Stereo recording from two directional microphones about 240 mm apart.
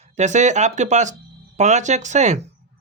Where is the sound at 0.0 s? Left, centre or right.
Right.